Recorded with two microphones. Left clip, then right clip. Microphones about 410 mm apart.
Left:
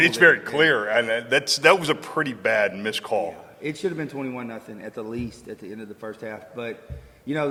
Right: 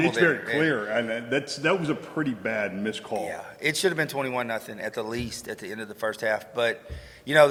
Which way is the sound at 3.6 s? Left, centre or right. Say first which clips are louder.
Right 4 dB; right.